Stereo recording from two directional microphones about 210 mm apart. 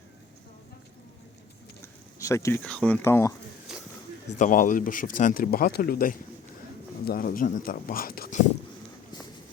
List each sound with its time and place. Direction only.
2.1 s speech: 15° left (ahead or behind)
3.7 s a sound: 5° right (ahead or behind)
4.4 s speech: 40° left (ahead or behind)